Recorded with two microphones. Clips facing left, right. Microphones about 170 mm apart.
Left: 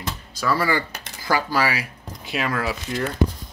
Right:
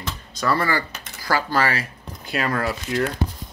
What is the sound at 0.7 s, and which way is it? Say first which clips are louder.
Speech: left 1 dB; 15° left (ahead or behind).